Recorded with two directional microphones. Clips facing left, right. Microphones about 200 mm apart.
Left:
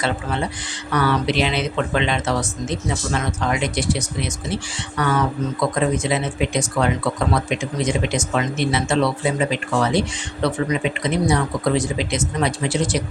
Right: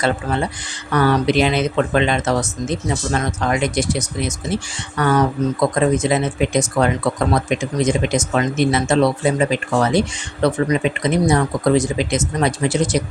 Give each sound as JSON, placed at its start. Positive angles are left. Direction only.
{"t": 0.9, "sound": "speech", "side_deg": -40}